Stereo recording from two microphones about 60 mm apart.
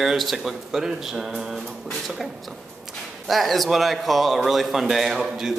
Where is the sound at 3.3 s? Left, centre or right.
Centre.